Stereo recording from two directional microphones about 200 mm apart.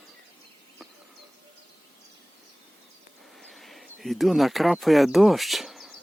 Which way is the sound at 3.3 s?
Centre (ahead or behind).